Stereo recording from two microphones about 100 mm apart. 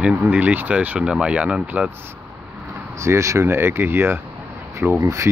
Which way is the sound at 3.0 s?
30° right (ahead or behind).